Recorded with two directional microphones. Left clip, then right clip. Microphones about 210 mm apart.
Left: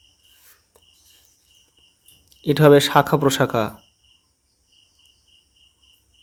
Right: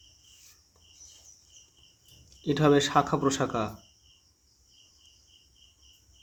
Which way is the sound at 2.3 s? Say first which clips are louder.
Left 10 dB; 40° left (ahead or behind).